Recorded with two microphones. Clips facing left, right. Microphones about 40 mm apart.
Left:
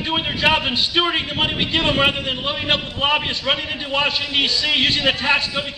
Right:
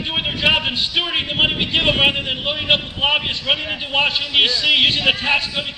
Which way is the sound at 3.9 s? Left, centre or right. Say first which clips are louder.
Right 2 dB; right.